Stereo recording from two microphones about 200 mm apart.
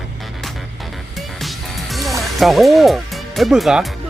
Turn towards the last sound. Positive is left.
turn(degrees=0)  # may be behind; listen again after turning